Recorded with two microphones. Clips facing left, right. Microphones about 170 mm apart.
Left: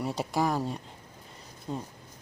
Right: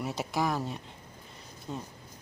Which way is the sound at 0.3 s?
10° left (ahead or behind).